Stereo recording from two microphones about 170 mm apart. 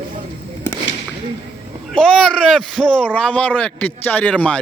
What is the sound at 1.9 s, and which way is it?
A child's voice, 5° left (ahead or behind).